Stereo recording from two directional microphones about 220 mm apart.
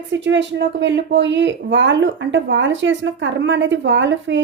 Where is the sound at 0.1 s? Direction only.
55° right (ahead or behind).